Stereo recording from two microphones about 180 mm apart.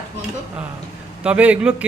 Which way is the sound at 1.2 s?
5° right (ahead or behind).